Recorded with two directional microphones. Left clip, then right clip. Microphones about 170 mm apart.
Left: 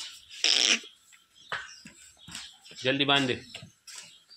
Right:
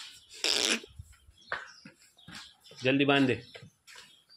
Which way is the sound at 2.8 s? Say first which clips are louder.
Left 1 dB; 35° right (ahead or behind).